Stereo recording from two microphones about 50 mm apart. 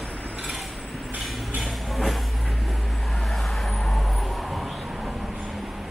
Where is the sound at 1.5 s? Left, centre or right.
Centre.